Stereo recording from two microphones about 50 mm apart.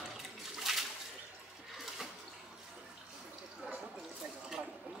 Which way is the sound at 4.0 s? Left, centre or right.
Centre.